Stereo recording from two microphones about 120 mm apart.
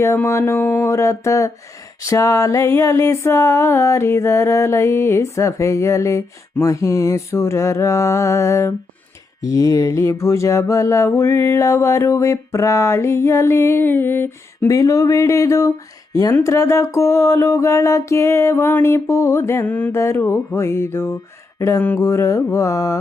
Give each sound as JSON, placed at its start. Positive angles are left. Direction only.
{"t": 0.3, "sound": "music", "side_deg": 20}